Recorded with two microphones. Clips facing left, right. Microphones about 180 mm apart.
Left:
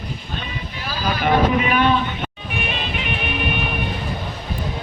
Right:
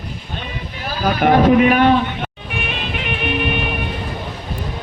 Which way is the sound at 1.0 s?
55° right (ahead or behind).